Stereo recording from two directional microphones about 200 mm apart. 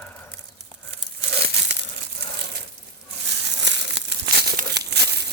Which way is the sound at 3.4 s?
60° right (ahead or behind).